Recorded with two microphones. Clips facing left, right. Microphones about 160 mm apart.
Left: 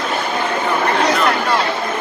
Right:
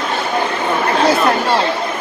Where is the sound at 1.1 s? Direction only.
30° right (ahead or behind).